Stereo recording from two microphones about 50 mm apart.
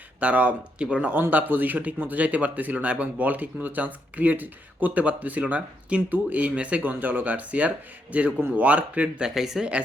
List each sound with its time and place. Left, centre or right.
0.2 s speech: right
1.3 s speech: right
6.8 s speech: right
9.3 s speech: centre